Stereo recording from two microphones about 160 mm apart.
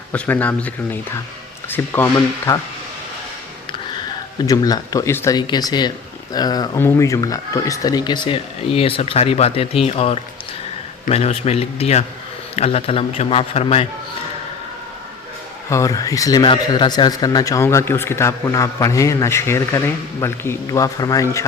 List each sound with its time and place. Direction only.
0.1 s speech: 10° left (ahead or behind)
4.4 s speech: 25° left (ahead or behind); by 13.8 s 40° left (ahead or behind)
15.7 s speech: 20° left (ahead or behind)